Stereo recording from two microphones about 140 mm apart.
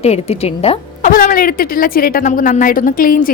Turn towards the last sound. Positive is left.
turn(degrees=85)